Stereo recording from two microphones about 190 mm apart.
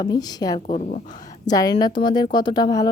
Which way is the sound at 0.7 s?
40° left (ahead or behind).